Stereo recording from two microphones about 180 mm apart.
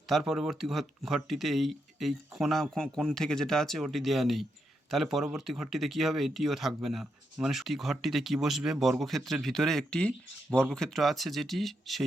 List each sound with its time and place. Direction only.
0.1 s speech: centre (ahead or behind)